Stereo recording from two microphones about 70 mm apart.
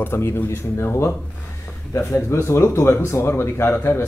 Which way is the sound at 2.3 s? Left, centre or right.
Left.